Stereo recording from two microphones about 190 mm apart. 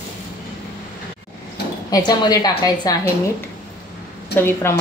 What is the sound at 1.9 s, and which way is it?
A woman's voice, 20° left (ahead or behind).